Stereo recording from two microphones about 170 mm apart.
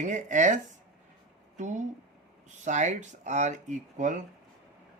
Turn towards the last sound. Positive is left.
turn(degrees=-45)  # may be behind; listen again after turning